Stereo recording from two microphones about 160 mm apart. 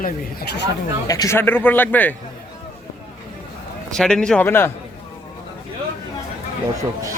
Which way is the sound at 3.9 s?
5° left (ahead or behind).